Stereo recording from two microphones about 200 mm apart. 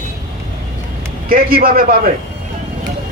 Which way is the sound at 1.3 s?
45° right (ahead or behind).